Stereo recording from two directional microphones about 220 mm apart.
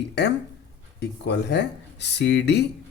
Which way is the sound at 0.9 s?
50° left (ahead or behind).